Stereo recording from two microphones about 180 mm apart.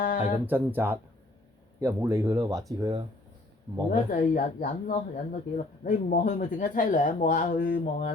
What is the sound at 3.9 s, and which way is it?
Speech, 50° left (ahead or behind).